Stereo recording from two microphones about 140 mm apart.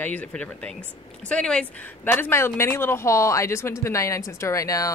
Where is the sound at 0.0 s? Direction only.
10° left (ahead or behind).